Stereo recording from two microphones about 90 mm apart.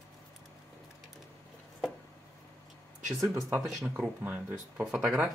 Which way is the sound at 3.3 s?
25° right (ahead or behind).